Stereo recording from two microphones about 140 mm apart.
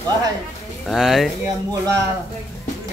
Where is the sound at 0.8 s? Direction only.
Centre (ahead or behind).